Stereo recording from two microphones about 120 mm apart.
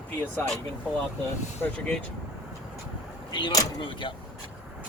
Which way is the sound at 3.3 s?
40° left (ahead or behind).